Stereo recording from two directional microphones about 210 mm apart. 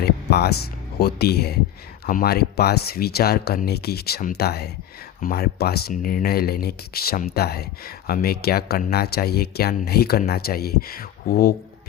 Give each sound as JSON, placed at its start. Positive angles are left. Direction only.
{"t": 0.0, "sound": "speech", "side_deg": 50}